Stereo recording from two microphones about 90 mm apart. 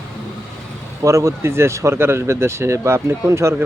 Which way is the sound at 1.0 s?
35° right (ahead or behind).